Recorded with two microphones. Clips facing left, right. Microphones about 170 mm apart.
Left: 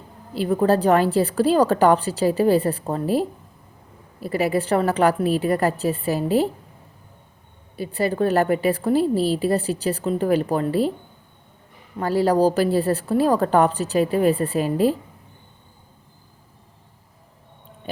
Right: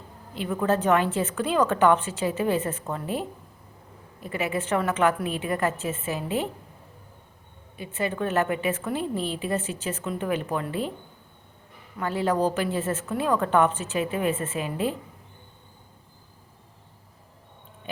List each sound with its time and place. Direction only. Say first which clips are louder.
0.3 s a woman's voice: left 6 dB; 35° left (ahead or behind)
7.8 s a woman's voice: left 7 dB; 35° left (ahead or behind)
11.9 s a woman's voice: left 6 dB; 35° left (ahead or behind)